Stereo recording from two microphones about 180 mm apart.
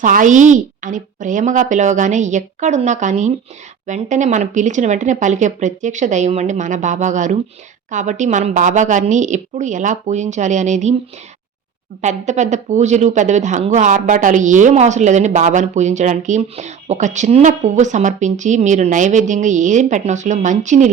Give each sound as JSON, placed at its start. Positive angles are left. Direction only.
{"t": 0.0, "sound": "speech", "side_deg": -45}
{"t": 12.0, "sound": "speech", "side_deg": -40}